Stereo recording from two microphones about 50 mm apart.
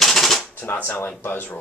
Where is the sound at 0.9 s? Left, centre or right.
Left.